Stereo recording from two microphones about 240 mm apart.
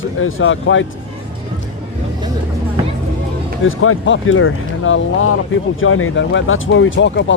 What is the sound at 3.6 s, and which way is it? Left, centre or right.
Speech, left.